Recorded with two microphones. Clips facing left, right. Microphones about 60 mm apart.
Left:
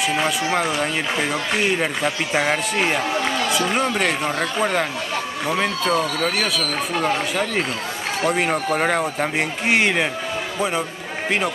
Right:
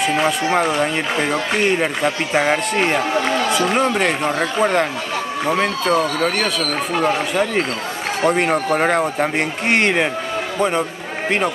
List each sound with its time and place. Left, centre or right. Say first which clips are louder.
0.0 s a man's voice: right 3 dB; centre